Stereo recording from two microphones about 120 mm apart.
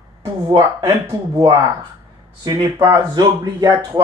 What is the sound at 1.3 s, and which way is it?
Speech, 30° right (ahead or behind).